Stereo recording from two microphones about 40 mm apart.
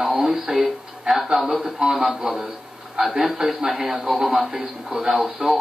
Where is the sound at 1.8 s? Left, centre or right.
Right.